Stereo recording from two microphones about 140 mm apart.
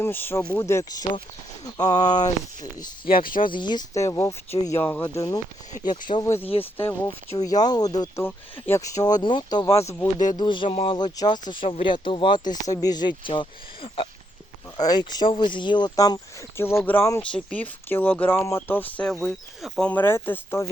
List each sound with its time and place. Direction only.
0.0 s speech: 15° left (ahead or behind)
3.1 s speech: 90° left
3.5 s speech: 30° left (ahead or behind); by 5.2 s 15° left (ahead or behind)
6.2 s speech: 20° left (ahead or behind)
7.3 s speech: 30° left (ahead or behind); by 19.9 s centre (ahead or behind)
19.9 s speech: 15° left (ahead or behind)